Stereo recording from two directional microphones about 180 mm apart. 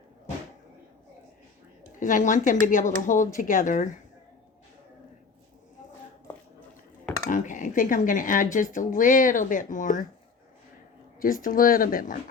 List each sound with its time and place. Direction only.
2.0 s speech: 45° left (ahead or behind)
7.3 s speech: 45° left (ahead or behind)
11.2 s speech: 50° left (ahead or behind)